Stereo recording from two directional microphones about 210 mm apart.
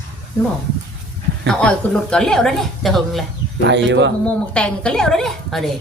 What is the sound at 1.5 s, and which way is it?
A woman's voice, 5° left (ahead or behind).